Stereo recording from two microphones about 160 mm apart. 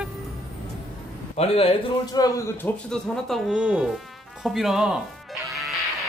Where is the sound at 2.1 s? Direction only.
20° left (ahead or behind).